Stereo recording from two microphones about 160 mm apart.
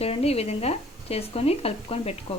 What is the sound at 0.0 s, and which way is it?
Speech, 40° left (ahead or behind).